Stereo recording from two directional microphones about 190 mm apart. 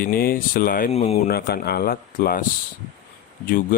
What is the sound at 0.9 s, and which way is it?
Speech, 35° left (ahead or behind).